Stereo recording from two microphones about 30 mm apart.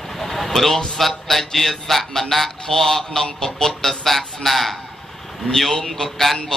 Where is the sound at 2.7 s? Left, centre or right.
Centre.